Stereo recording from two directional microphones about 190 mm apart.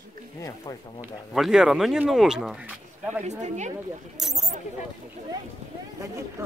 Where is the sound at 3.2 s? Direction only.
40° right (ahead or behind).